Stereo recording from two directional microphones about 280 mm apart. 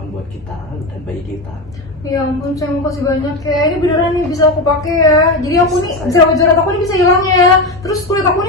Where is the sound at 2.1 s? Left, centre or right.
Centre.